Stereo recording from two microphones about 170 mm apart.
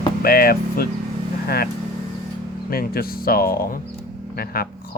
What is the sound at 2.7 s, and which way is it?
Speech, 60° left (ahead or behind).